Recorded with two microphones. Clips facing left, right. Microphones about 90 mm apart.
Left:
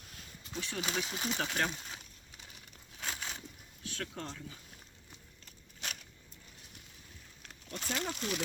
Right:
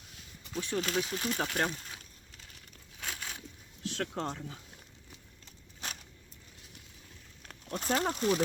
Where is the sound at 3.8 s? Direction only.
75° right (ahead or behind); by 4.6 s 60° right (ahead or behind).